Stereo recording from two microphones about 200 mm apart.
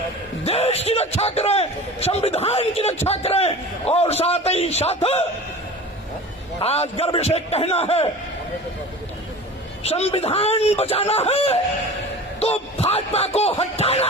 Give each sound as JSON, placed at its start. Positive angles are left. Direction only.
{"t": 0.4, "sound": "a man's voice", "side_deg": 30}
{"t": 6.6, "sound": "a man's voice", "side_deg": 30}
{"t": 9.8, "sound": "a man's voice", "side_deg": 30}